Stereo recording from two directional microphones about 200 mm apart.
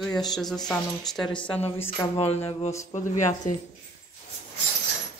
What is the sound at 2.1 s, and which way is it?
Speech, 30° left (ahead or behind).